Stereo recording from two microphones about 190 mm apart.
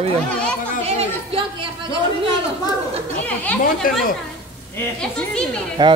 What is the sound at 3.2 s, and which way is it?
Chatter, 5° left (ahead or behind).